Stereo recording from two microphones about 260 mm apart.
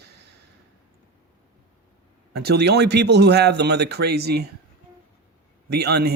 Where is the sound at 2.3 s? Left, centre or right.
Right.